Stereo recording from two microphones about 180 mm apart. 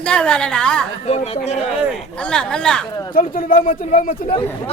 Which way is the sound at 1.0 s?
35° left (ahead or behind).